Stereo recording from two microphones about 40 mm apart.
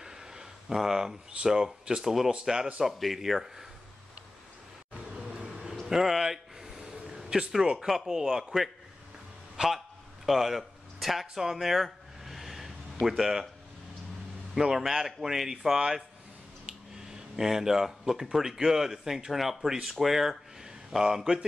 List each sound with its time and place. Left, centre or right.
0.0 s a sound: centre
0.7 s speech: centre
2.9 s speech: centre
4.9 s vehicle: centre
5.9 s a sound: centre
7.8 s speech: centre
9.6 s a man's voice: right
10.2 s a sound: centre
13.0 s speech: centre
14.6 s speech: centre